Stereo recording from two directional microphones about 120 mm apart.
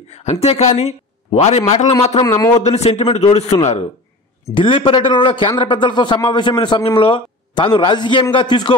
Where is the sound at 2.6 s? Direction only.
60° left (ahead or behind).